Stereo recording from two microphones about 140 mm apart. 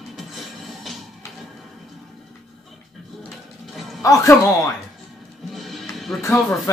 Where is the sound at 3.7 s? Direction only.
Centre (ahead or behind).